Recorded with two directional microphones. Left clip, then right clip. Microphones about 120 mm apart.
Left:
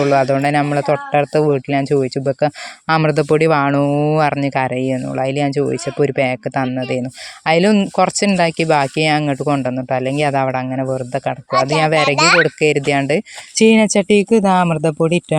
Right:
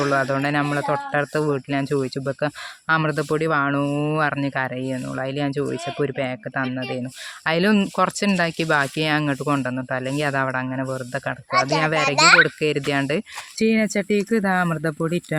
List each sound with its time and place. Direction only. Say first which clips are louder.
0.0 s speech: left 7 dB; 40° left (ahead or behind)
3.0 s speech: left 8 dB; 50° left (ahead or behind)
3.8 s speech: left 8 dB; 35° left (ahead or behind)
4.2 s speech: left 6 dB; 50° left (ahead or behind); by 9.8 s 30° left (ahead or behind)
9.9 s speech: left 7 dB; 40° left (ahead or behind)
13.6 s speech: left 9 dB; 65° left (ahead or behind); by 15.4 s 45° left (ahead or behind)